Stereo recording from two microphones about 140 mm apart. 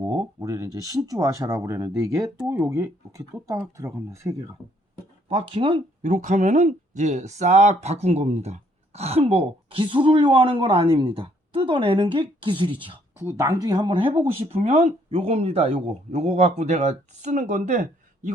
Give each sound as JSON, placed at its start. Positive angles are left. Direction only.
{"t": 0.3, "sound": "speech", "side_deg": -20}
{"t": 5.3, "sound": "speech", "side_deg": -40}
{"t": 6.0, "sound": "speech", "side_deg": -60}
{"t": 13.1, "sound": "speech", "side_deg": -20}
{"t": 14.3, "sound": "speech", "side_deg": -50}